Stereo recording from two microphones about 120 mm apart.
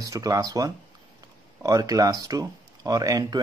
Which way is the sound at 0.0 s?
30° right (ahead or behind).